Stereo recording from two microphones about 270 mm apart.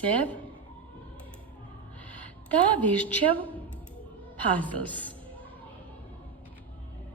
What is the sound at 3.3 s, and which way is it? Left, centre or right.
Speech, centre.